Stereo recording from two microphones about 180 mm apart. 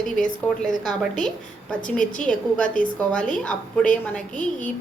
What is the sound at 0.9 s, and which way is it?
A woman's voice, 5° left (ahead or behind).